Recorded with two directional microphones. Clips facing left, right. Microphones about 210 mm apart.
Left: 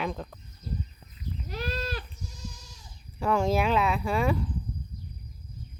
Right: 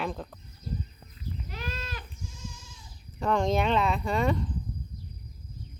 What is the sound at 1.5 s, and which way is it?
Goat, 35° left (ahead or behind).